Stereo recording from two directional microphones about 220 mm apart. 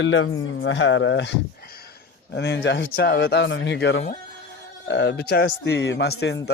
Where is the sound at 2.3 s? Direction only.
55° left (ahead or behind).